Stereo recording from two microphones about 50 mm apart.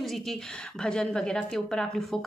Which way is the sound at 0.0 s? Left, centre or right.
Centre.